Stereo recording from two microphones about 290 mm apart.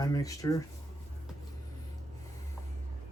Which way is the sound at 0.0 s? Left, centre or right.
Centre.